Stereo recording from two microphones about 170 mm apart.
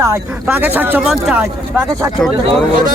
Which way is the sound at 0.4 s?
10° right (ahead or behind).